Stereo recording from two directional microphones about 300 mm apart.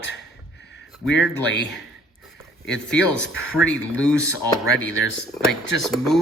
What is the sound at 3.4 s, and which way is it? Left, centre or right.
Speech, left.